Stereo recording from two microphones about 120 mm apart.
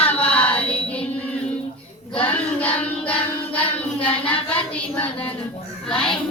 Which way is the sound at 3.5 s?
10° left (ahead or behind).